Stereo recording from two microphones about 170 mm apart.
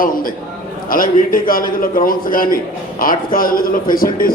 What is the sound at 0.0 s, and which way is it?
A man's voice, 55° left (ahead or behind).